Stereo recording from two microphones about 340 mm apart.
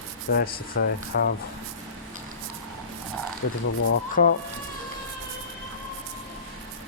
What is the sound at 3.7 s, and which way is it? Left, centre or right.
Speech, left.